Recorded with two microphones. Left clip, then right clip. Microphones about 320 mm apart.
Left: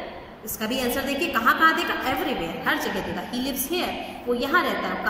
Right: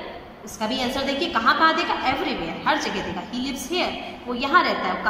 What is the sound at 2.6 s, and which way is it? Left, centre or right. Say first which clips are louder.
Speech: right 3 dB; right.